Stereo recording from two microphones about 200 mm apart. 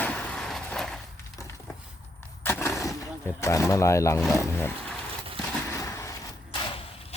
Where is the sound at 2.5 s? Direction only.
10° left (ahead or behind).